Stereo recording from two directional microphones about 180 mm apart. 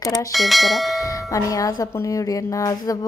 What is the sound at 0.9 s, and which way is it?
Bell, 20° left (ahead or behind).